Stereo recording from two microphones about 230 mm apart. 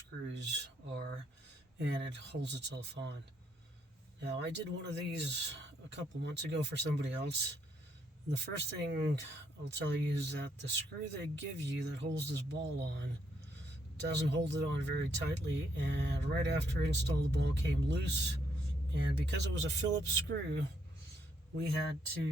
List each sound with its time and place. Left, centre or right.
0.3 s a sound: right
1.8 s speech: right
4.2 s speech: right
8.8 s speech: right